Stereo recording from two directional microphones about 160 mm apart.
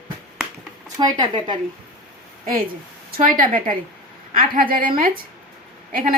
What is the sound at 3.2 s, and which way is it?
A woman's voice, 60° right (ahead or behind).